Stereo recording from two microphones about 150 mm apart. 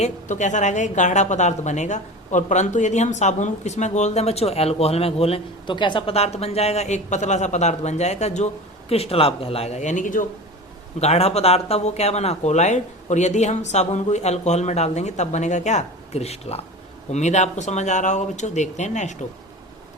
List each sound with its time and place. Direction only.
0.0 s speech: 55° left (ahead or behind)
11.0 s speech: 45° left (ahead or behind)